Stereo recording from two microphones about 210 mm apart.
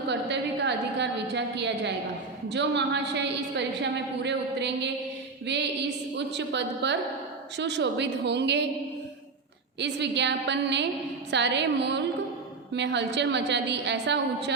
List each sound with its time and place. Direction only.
0.1 s a woman's voice: 55° right (ahead or behind)
9.8 s a woman's voice: 55° right (ahead or behind)